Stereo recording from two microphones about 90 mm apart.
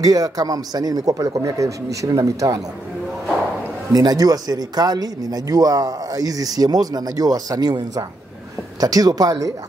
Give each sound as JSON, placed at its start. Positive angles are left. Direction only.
{"t": 0.0, "sound": "speech", "side_deg": -45}
{"t": 3.9, "sound": "speech", "side_deg": -45}